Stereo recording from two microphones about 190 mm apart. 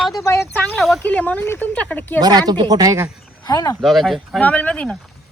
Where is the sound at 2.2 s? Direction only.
20° right (ahead or behind).